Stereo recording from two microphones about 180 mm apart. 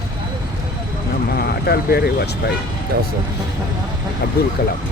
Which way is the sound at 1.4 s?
60° left (ahead or behind).